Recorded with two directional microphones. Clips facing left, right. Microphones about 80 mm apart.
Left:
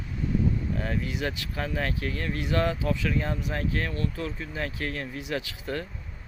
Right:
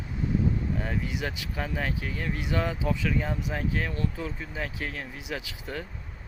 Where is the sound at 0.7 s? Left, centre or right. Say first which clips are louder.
Left 1 dB; centre.